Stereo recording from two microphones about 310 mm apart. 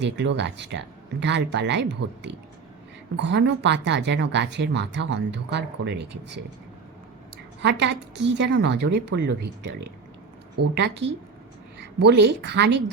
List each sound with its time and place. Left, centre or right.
0.0 s speech: right
7.6 s speech: right
10.6 s a woman's voice: right
11.0 s a woman's voice: right
12.0 s speech: right